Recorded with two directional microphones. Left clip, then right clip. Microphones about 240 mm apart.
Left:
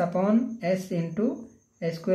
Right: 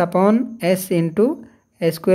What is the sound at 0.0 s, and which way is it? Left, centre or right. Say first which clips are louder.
A man's voice: right 8 dB; right.